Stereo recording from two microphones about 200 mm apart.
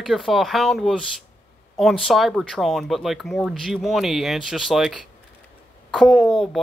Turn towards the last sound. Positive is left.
turn(degrees=0)  # may be behind; listen again after turning